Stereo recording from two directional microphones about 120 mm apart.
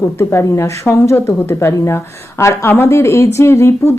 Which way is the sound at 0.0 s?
20° left (ahead or behind).